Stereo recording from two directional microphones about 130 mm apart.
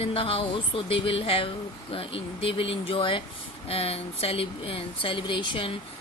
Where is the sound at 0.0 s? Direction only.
45° left (ahead or behind).